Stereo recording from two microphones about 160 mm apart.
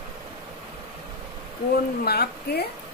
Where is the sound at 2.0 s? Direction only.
80° left.